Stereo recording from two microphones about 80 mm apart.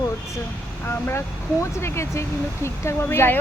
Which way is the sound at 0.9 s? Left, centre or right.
Left.